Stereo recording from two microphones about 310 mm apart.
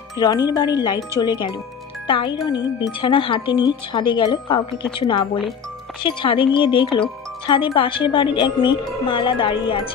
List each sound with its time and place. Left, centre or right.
0.2 s speech: centre